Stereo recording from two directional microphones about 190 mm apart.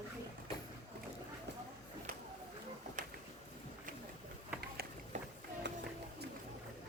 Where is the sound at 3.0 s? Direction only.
45° right (ahead or behind).